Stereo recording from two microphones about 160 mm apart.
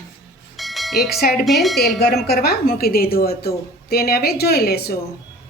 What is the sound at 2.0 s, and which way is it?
A woman's voice, 90° left.